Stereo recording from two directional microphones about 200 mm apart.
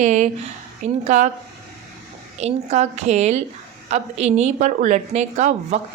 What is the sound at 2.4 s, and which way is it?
A woman's voice, 35° right (ahead or behind).